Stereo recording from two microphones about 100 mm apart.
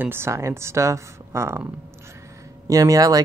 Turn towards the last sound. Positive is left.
turn(degrees=-35)  # may be behind; listen again after turning